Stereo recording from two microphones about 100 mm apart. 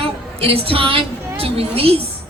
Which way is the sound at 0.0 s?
70° right (ahead or behind).